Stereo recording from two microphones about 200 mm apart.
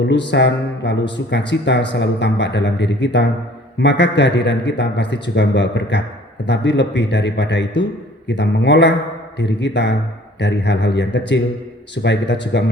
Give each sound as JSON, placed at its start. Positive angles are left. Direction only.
{"t": 0.0, "sound": "speech", "side_deg": 60}